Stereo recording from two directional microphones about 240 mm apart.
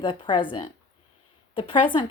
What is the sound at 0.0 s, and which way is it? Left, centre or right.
A woman's voice, centre.